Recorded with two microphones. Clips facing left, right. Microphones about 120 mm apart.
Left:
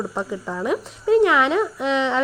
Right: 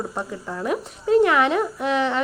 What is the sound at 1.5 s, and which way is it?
Speech, 5° right (ahead or behind).